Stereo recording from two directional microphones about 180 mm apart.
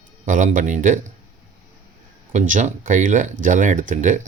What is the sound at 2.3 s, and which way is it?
Speech, 45° right (ahead or behind).